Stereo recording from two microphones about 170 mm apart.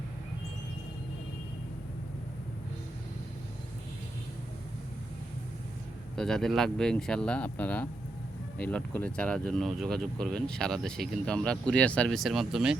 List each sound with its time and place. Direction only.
6.1 s speech: 5° left (ahead or behind)